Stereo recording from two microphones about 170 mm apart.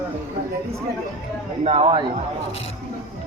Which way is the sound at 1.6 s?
35° right (ahead or behind).